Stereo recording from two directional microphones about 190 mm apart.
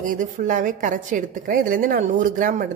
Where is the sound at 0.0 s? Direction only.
45° right (ahead or behind).